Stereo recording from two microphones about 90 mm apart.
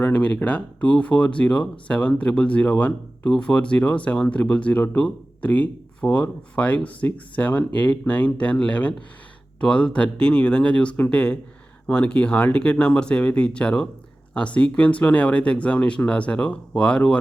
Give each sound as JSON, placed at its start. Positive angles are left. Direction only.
{"t": 0.0, "sound": "speech", "side_deg": 15}